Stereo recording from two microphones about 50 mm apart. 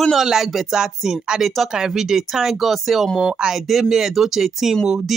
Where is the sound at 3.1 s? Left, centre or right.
Centre.